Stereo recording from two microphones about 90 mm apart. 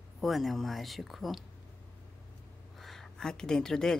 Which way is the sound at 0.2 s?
Centre (ahead or behind).